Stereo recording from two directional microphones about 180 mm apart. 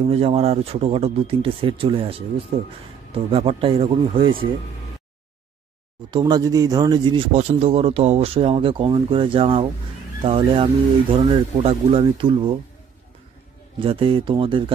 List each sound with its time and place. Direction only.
0.1 s speech: 35° right (ahead or behind)
6.0 s speech: 25° right (ahead or behind)
13.7 s speech: 30° right (ahead or behind)